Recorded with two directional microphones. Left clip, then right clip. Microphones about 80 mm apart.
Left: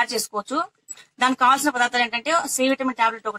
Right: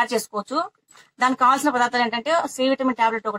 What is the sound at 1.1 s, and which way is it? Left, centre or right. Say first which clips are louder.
A woman's voice: even; centre.